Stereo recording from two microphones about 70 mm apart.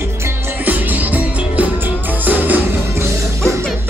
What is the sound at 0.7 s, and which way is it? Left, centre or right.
Music, right.